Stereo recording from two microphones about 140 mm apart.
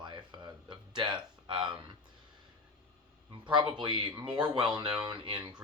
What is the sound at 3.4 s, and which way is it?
Speech, 35° right (ahead or behind).